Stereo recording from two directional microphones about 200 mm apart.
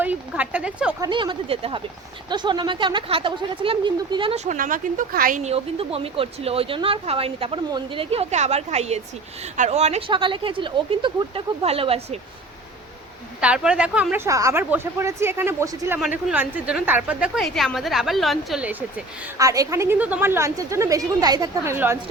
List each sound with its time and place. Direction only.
0.0 s speech: 10° right (ahead or behind)
1.0 s speech: 25° right (ahead or behind)
13.4 s a woman's voice: 5° right (ahead or behind)